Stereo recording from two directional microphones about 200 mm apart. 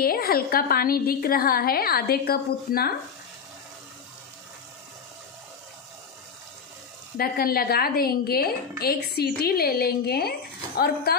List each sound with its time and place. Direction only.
0.0 s a woman's voice: 50° left (ahead or behind)
7.2 s a woman's voice: 45° left (ahead or behind)